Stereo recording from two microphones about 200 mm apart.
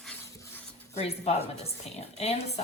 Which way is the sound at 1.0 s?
30° left (ahead or behind).